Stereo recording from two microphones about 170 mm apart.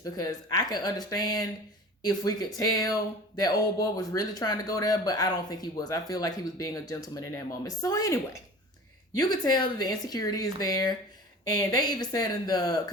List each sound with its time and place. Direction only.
0.0 s speech: 20° left (ahead or behind)